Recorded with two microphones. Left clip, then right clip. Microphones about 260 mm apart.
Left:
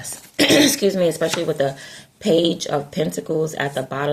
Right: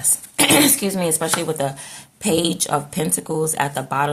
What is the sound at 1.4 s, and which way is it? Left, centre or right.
Speech, centre.